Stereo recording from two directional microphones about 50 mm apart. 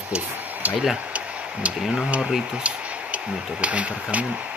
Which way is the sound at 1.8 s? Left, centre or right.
Centre.